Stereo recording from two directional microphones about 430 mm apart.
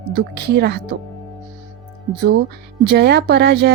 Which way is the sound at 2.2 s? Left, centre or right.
Right.